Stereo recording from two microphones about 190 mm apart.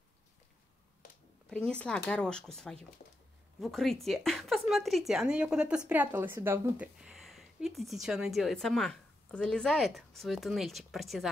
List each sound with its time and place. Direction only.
1.5 s a woman's voice: 5° left (ahead or behind)